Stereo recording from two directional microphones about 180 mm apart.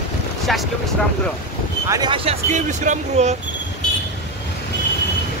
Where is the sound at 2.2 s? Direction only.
40° right (ahead or behind).